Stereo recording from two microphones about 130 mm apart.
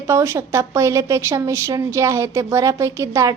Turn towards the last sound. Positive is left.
turn(degrees=-25)  # may be behind; listen again after turning